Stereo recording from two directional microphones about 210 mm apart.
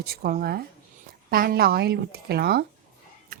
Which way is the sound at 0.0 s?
45° right (ahead or behind).